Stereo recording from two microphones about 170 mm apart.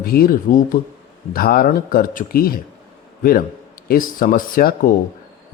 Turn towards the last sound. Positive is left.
turn(degrees=55)  # may be behind; listen again after turning